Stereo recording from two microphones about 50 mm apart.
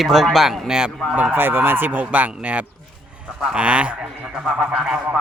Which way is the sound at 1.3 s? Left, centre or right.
Right.